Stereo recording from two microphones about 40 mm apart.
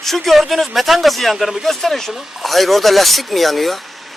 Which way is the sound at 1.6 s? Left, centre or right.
Centre.